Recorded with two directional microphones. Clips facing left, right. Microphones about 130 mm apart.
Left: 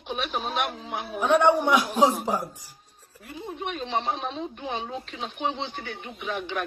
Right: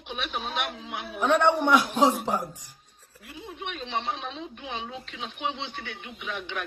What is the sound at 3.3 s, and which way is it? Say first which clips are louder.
Speech: left 4 dB; 40° left (ahead or behind).